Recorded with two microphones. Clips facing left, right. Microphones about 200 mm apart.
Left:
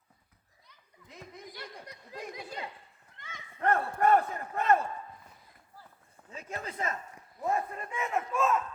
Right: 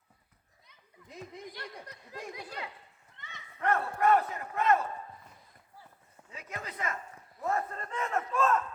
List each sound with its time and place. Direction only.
1.5 s speech: 15° left (ahead or behind)
3.2 s a sound: 45° left (ahead or behind)
3.7 s speech: 30° left (ahead or behind)
6.3 s speech: 30° left (ahead or behind)
7.4 s speech: 15° left (ahead or behind)